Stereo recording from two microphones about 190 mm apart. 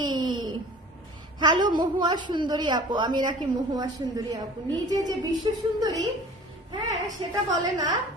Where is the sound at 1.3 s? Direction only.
25° right (ahead or behind).